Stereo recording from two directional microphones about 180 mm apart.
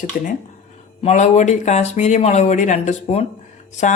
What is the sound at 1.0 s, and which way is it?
A woman's voice, 40° left (ahead or behind).